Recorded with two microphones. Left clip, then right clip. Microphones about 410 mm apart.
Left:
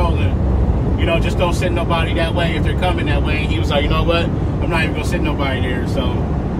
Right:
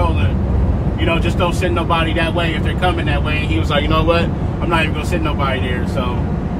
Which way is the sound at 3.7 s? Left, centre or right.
Centre.